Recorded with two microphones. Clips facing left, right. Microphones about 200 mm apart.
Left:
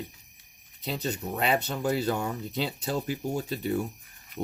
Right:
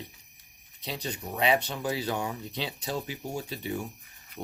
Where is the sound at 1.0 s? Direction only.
45° left (ahead or behind).